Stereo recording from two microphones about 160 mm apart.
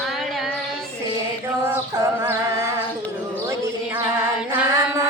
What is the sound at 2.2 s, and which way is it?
Music, 15° right (ahead or behind).